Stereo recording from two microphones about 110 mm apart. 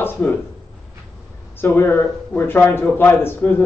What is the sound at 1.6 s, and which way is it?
A man's voice, 20° left (ahead or behind).